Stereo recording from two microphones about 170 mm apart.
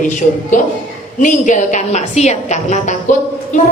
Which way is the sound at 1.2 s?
50° left (ahead or behind).